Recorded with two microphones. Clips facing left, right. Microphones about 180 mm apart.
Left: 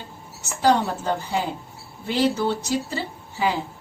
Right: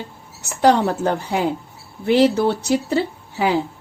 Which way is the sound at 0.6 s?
65° right (ahead or behind).